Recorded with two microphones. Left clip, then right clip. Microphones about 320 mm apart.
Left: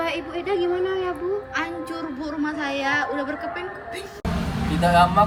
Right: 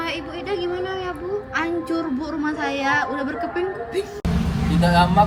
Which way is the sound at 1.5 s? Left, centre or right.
Centre.